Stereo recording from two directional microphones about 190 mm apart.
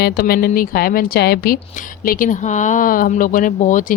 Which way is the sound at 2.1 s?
45° left (ahead or behind).